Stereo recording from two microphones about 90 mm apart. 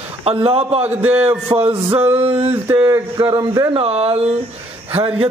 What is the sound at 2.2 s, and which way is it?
Mantra, 90° right.